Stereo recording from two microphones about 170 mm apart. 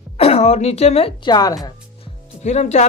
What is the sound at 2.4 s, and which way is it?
Speech, 40° left (ahead or behind).